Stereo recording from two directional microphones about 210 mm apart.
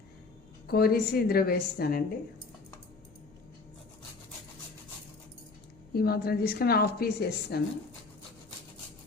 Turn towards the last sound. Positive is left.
turn(degrees=50)  # may be behind; listen again after turning